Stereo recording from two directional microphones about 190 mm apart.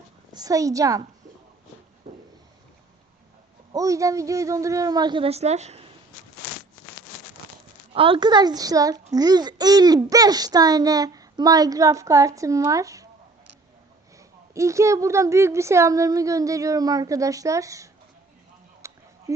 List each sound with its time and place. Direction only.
0.3 s a woman's voice: 20° right (ahead or behind)
2.0 s a sound: 30° right (ahead or behind)
3.7 s a child's voice: 20° right (ahead or behind); by 5.9 s 35° right (ahead or behind)
7.9 s a child's voice: 25° right (ahead or behind)
14.2 s a woman's voice: 15° right (ahead or behind)
18.8 s a sound: 15° right (ahead or behind)